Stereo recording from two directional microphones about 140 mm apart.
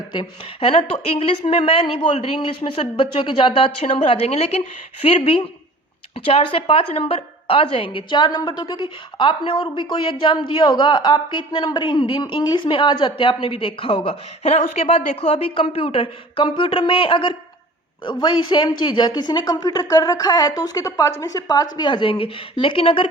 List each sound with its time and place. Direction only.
0.1 s a woman's voice: 40° left (ahead or behind)